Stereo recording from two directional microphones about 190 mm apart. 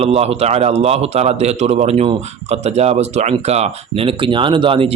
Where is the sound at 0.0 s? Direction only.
30° right (ahead or behind).